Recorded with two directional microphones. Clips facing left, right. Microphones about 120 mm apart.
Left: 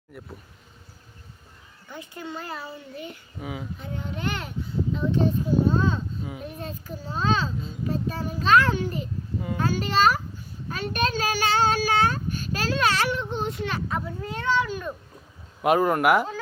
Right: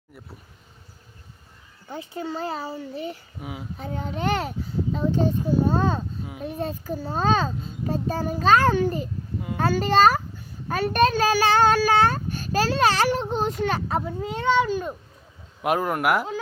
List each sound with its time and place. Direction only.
1.9 s speech: 30° right (ahead or behind)
3.4 s speech: 5° right (ahead or behind)
3.8 s a child's voice: 40° right (ahead or behind)
14.3 s a child's voice: 25° right (ahead or behind)
15.6 s speech: centre (ahead or behind)